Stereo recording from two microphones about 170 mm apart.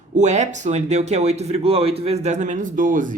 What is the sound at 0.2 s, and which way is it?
Speech, 45° right (ahead or behind).